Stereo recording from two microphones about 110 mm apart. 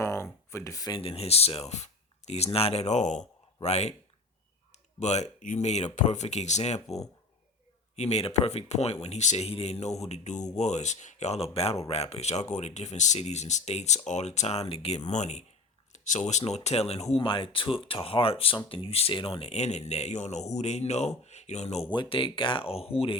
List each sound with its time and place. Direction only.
0.0 s a sound: 25° left (ahead or behind)
0.9 s speech: 55° left (ahead or behind); by 3.9 s 80° left
4.7 s speech: 90° left
7.9 s speech: 75° left (ahead or behind)
17.2 s speech: 50° left (ahead or behind); by 21.8 s 80° left
21.8 s speech: 50° left (ahead or behind)